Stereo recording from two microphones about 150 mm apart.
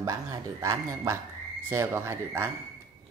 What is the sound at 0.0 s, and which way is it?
Speech, 20° right (ahead or behind).